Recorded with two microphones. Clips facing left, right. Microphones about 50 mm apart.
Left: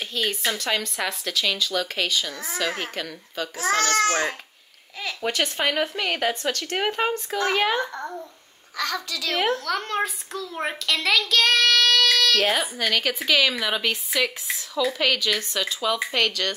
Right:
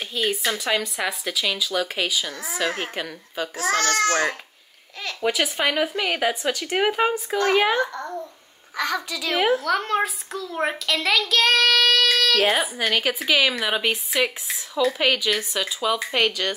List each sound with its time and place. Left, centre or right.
0.0 s a woman's voice: centre
5.0 s a woman's voice: centre
7.9 s a child's voice: centre
8.7 s a child's voice: centre
9.4 s a woman's voice: centre